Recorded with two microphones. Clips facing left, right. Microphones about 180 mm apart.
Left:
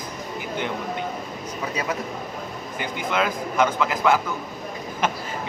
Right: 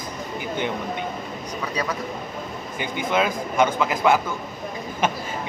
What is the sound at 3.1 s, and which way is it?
A man's voice, 25° right (ahead or behind).